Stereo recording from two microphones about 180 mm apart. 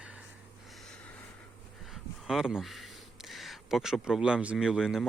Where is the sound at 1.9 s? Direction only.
Centre (ahead or behind).